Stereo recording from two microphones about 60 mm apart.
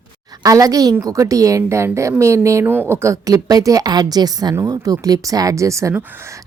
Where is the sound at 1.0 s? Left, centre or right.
Right.